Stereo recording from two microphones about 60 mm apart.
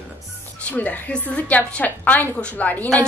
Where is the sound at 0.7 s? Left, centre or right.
Left.